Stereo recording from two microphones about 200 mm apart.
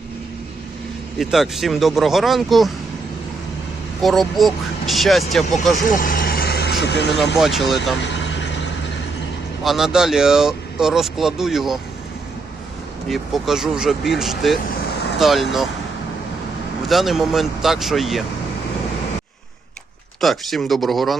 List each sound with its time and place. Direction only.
1.2 s speech: centre (ahead or behind)
4.0 s speech: centre (ahead or behind)
5.9 s vehicle: 45° left (ahead or behind)
7.3 s speech: centre (ahead or behind)
9.6 s speech: centre (ahead or behind)
13.1 s speech: centre (ahead or behind)
16.9 s speech: centre (ahead or behind)
20.2 s speech: centre (ahead or behind)